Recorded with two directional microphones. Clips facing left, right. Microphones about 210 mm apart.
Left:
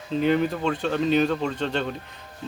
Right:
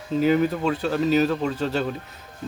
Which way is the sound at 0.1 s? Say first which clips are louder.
Right 2 dB; 5° right (ahead or behind).